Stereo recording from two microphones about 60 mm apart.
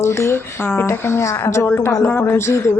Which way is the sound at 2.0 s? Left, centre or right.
Left.